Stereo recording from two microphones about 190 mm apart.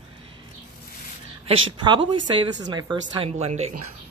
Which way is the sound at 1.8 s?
25° right (ahead or behind).